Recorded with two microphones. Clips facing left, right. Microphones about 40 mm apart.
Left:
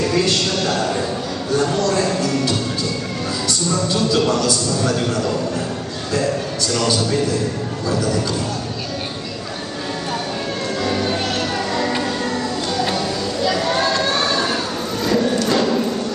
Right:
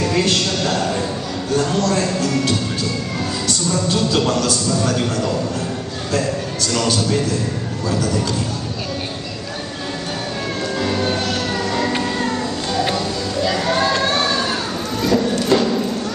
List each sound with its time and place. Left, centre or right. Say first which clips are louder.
0.7 s speech: even; centre
4.2 s speech: left 1 dB; centre
10.8 s music: even; centre
12.9 s a sound: even; centre
13.9 s vehicle: right 1 dB; right
15.0 s a sound: right 1 dB; centre
15.4 s music: right 1 dB; centre